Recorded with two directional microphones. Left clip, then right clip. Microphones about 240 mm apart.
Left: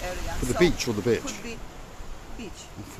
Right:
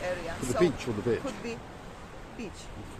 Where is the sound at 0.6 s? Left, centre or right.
Left.